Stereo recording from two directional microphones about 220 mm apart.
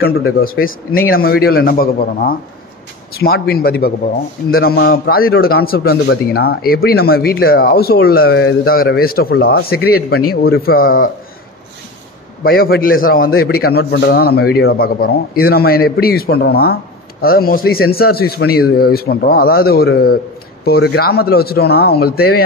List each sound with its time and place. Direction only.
0.7 s speech: 40° left (ahead or behind)
12.4 s speech: 45° left (ahead or behind)